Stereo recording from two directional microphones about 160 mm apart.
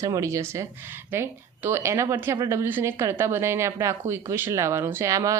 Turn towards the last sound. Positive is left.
turn(degrees=-20)  # may be behind; listen again after turning